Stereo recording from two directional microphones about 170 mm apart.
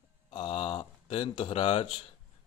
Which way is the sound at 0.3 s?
30° left (ahead or behind).